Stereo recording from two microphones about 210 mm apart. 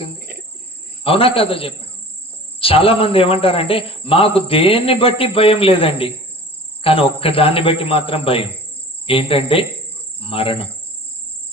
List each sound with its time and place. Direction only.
0.2 s cricket: 45° right (ahead or behind)
1.0 s a man's voice: 25° left (ahead or behind)